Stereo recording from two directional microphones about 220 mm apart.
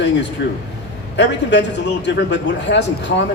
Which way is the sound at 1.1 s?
55° left (ahead or behind).